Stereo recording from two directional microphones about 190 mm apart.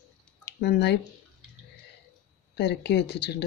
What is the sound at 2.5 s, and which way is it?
Speech, 65° left (ahead or behind).